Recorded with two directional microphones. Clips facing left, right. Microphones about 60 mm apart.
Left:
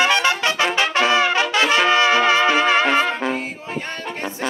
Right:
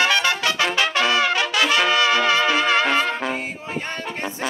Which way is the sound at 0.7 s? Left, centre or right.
Left.